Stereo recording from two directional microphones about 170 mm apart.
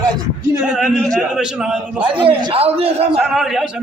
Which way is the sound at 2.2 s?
30° right (ahead or behind).